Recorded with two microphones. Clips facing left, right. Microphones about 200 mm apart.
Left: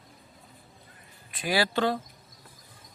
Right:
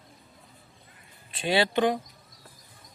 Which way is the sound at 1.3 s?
25° right (ahead or behind).